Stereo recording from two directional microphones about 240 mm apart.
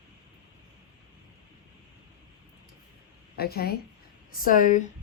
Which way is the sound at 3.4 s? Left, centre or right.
Left.